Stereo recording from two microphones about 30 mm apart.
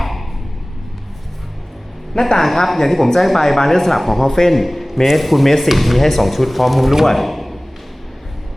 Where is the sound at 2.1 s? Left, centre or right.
Left.